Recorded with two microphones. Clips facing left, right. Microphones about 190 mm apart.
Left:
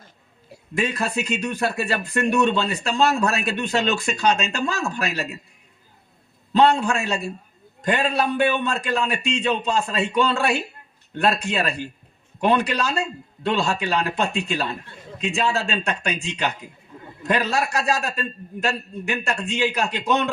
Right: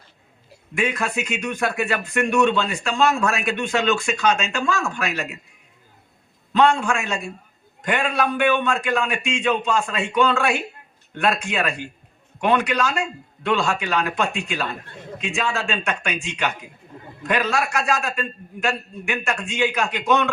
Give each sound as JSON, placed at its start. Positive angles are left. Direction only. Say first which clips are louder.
{"t": 0.7, "sound": "a man's voice", "louder": "even", "side_deg": 35}
{"t": 6.6, "sound": "a man's voice", "louder": "left 1 dB", "side_deg": 35}